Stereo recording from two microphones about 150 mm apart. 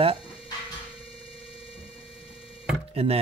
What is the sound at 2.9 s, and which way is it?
Speech, 40° right (ahead or behind).